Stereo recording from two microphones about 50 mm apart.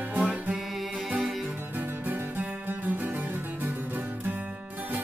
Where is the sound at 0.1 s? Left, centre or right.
Right.